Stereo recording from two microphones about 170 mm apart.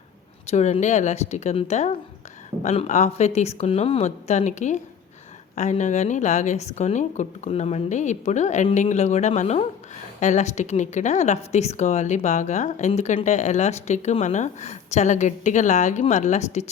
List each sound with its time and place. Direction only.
0.4 s speech: 40° left (ahead or behind)